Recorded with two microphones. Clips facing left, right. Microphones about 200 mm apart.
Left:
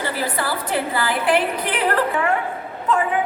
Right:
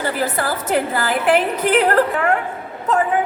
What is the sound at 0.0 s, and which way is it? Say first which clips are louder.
A woman's voice: right 3 dB; 45° right (ahead or behind).